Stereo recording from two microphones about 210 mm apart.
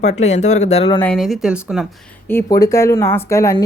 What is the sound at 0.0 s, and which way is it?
Speech, 35° left (ahead or behind).